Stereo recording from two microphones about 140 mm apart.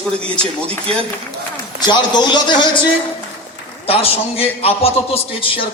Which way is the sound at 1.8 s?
30° left (ahead or behind).